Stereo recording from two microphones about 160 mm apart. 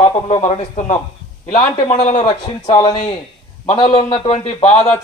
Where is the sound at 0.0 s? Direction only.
45° left (ahead or behind).